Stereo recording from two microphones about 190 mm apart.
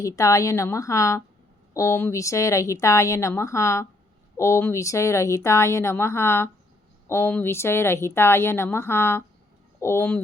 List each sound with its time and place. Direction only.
0.0 s speech: 15° left (ahead or behind)